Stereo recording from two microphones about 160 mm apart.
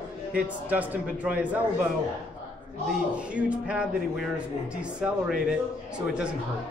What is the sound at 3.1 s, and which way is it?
A man's voice, 10° right (ahead or behind).